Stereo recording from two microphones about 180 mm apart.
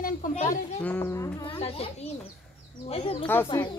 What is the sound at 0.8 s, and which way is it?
Speech, 15° left (ahead or behind).